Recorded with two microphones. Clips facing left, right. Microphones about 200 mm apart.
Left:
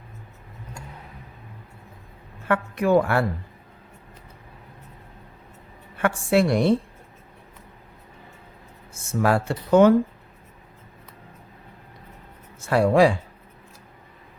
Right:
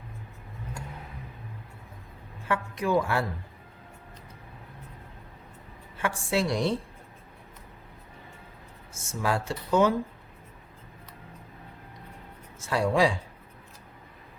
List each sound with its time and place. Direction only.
2.5 s speech: 60° left (ahead or behind)
6.0 s speech: 60° left (ahead or behind)
8.9 s speech: 60° left (ahead or behind)
12.5 s speech: 60° left (ahead or behind)